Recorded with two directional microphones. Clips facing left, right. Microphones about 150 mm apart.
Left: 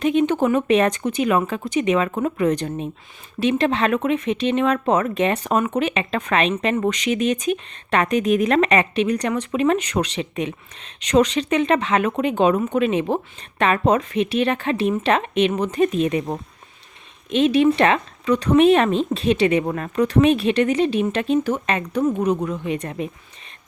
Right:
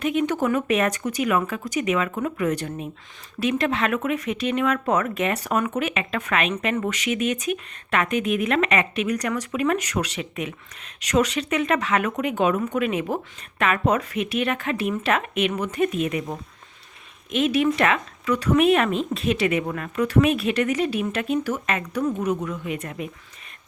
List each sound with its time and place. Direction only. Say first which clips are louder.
0.0 s speech: left 4 dB; 30° left (ahead or behind)